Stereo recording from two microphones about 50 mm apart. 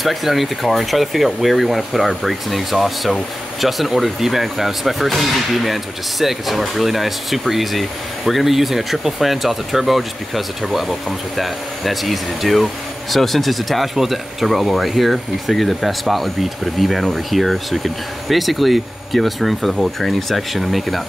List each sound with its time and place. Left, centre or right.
0.0 s speech: centre